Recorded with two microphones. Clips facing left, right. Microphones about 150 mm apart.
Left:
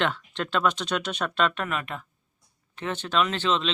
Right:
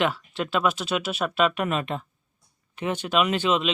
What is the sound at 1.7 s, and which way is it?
Speech, 25° right (ahead or behind).